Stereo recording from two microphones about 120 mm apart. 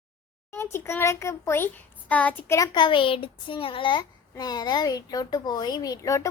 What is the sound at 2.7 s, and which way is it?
Child singing, 40° left (ahead or behind).